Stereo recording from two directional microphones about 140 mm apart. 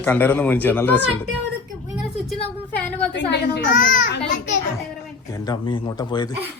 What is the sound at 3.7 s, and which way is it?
Speech, 70° left (ahead or behind).